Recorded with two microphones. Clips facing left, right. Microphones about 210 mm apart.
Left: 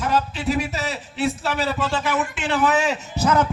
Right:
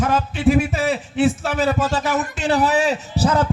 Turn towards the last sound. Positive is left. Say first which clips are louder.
# right 1 dB
turn(degrees=-30)  # may be behind; listen again after turning